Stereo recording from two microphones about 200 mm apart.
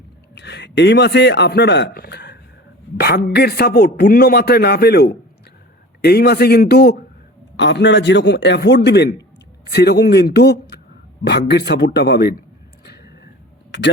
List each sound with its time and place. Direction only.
0.3 s a man's voice: 60° left (ahead or behind)
12.8 s vehicle: 55° left (ahead or behind)
13.7 s a sound: 60° left (ahead or behind)